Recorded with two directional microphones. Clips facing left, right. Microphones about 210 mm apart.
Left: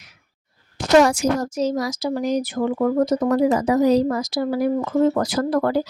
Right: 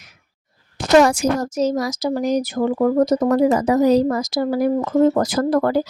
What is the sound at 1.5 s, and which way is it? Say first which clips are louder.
Speech: right 2 dB; 45° right (ahead or behind).